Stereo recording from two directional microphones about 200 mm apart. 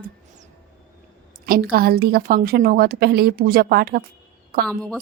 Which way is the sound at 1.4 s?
45° right (ahead or behind).